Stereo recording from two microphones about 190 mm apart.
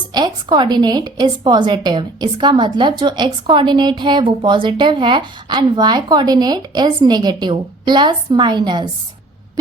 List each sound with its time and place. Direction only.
0.1 s a woman's voice: 20° right (ahead or behind)